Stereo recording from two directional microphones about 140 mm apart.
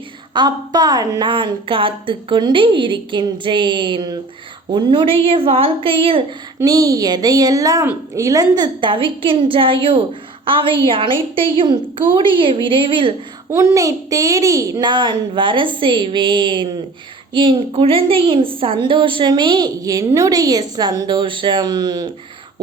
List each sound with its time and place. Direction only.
0.3 s a woman's voice: 30° right (ahead or behind)
6.6 s a woman's voice: 25° right (ahead or behind)
13.5 s a woman's voice: 20° right (ahead or behind)